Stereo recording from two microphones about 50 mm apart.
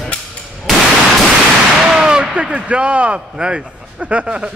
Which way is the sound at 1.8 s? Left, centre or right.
Centre.